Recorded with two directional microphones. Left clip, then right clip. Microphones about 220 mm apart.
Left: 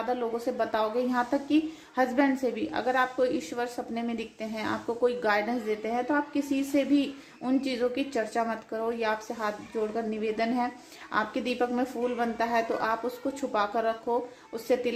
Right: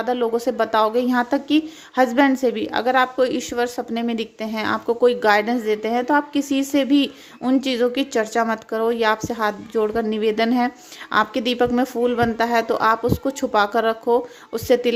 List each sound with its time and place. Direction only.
0.0 s a woman's voice: 35° right (ahead or behind)